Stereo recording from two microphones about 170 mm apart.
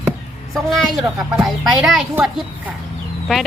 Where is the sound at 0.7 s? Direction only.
Centre (ahead or behind).